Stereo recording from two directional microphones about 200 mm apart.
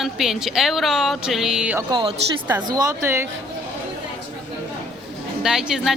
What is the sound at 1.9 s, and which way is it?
A woman's voice, 25° right (ahead or behind).